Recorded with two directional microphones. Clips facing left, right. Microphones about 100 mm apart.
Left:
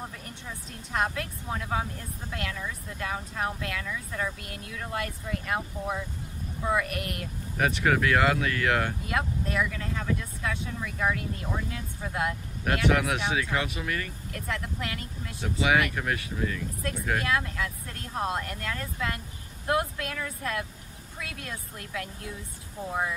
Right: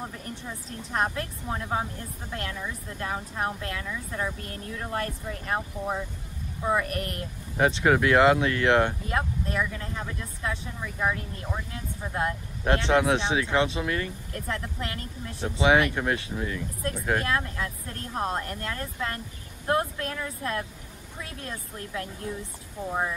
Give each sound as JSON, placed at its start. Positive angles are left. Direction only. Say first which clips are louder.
{"t": 0.7, "sound": "speech", "louder": "right 1 dB", "side_deg": -35}
{"t": 4.4, "sound": "speech", "louder": "right 3 dB", "side_deg": -35}
{"t": 7.5, "sound": "speech", "louder": "right 3 dB", "side_deg": -25}
{"t": 10.8, "sound": "speech", "louder": "right 1 dB", "side_deg": -10}
{"t": 12.0, "sound": "speech", "louder": "right 1 dB", "side_deg": -30}
{"t": 22.8, "sound": "speech", "louder": "right 1 dB", "side_deg": -5}